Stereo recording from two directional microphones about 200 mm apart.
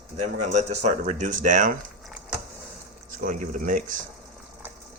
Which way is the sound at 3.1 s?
40° right (ahead or behind).